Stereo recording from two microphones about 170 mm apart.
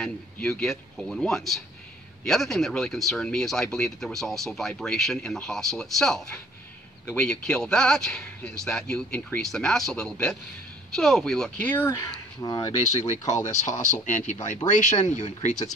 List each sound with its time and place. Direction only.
0.0 s speech: 5° left (ahead or behind); by 12.7 s 20° left (ahead or behind)
13.5 s speech: 45° left (ahead or behind)